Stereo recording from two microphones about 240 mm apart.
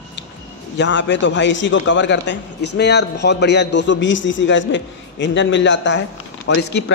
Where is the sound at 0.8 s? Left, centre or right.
Left.